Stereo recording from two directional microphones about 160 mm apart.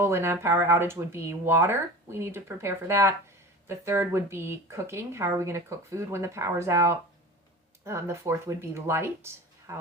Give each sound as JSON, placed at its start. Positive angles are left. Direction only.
{"t": 0.0, "sound": "speech", "side_deg": -15}